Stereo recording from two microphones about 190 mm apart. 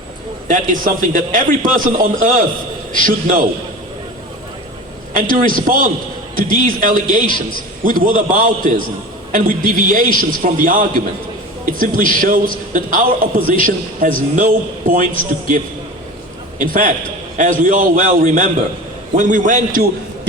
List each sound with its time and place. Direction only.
0.4 s a man's voice: 45° right (ahead or behind)
5.3 s a man's voice: 45° right (ahead or behind)